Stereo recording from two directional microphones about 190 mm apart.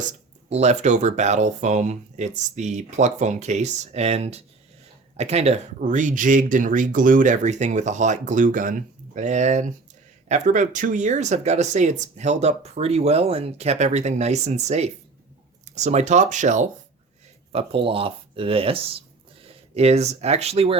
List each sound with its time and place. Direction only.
0.5 s speech: 35° right (ahead or behind)